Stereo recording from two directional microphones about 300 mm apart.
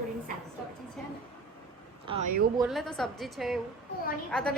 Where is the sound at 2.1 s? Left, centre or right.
Centre.